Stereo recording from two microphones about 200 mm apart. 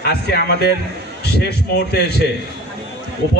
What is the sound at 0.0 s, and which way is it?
A man's voice, 55° left (ahead or behind).